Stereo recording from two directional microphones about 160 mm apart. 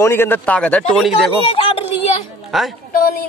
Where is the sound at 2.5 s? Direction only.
Centre (ahead or behind).